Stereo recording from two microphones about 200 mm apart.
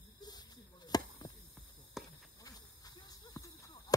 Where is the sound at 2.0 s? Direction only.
Centre (ahead or behind).